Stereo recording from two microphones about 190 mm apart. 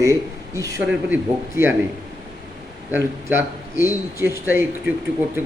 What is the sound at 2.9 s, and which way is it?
Speech, 15° right (ahead or behind).